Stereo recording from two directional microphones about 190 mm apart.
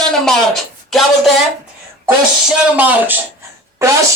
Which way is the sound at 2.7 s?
10° right (ahead or behind).